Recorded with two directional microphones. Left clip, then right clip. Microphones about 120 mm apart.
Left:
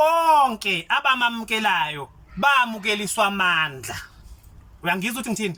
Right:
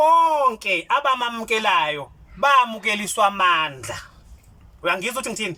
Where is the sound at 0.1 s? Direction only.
25° right (ahead or behind).